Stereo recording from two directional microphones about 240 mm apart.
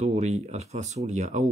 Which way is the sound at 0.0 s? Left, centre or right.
Right.